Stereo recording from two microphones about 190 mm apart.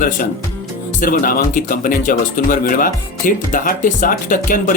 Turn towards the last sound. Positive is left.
turn(degrees=45)  # may be behind; listen again after turning